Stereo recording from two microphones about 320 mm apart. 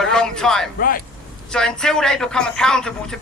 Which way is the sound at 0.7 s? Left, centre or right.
Left.